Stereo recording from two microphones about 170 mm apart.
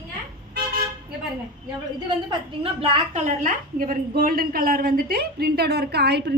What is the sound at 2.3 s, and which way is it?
A woman's voice, 35° right (ahead or behind).